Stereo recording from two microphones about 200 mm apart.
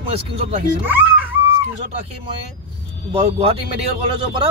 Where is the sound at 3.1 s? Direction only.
30° right (ahead or behind).